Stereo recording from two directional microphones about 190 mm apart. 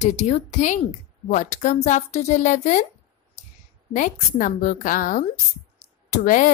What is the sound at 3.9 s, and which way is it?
A woman's voice, 40° left (ahead or behind).